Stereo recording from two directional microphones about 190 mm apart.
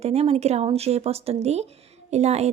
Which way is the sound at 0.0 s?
35° right (ahead or behind).